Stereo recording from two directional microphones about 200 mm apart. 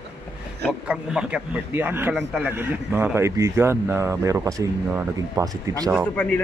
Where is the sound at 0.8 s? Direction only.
5° right (ahead or behind).